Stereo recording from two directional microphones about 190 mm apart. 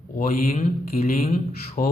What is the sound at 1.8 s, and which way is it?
Speech, 50° left (ahead or behind).